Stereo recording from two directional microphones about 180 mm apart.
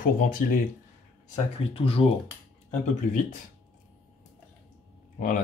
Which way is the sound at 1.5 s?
30° left (ahead or behind).